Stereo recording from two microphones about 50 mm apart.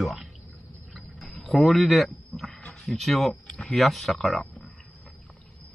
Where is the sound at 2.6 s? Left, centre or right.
Centre.